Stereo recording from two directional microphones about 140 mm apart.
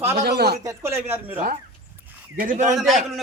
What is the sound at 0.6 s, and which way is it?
Speech, 20° right (ahead or behind).